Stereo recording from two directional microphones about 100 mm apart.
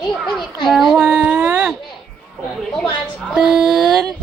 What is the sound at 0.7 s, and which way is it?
Speech, centre (ahead or behind).